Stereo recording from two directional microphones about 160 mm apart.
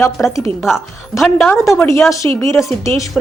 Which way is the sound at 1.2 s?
Centre (ahead or behind).